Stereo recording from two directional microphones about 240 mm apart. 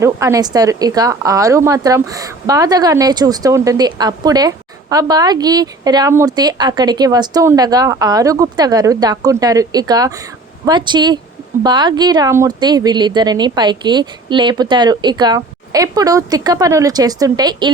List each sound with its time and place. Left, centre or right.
0.0 s a woman's voice: centre